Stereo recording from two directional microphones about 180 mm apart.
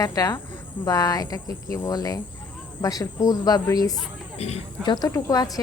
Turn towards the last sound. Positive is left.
turn(degrees=20)  # may be behind; listen again after turning